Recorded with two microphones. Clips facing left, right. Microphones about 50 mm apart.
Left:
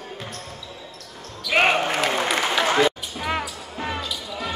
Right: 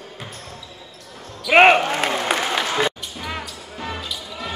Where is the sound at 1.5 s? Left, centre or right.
Right.